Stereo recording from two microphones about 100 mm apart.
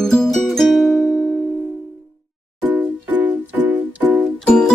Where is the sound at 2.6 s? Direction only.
15° right (ahead or behind).